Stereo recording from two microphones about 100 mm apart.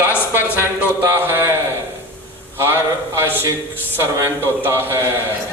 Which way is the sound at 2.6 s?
25° right (ahead or behind).